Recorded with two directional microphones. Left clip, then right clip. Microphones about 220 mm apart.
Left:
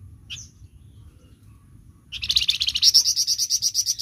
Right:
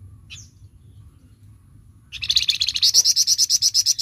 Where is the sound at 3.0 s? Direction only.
25° right (ahead or behind).